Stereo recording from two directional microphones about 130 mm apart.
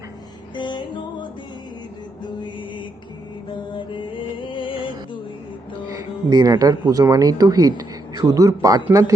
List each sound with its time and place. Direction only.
0.5 s music: 35° left (ahead or behind)
5.9 s speech: 30° right (ahead or behind)